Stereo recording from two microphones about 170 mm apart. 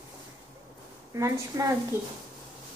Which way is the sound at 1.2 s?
15° right (ahead or behind).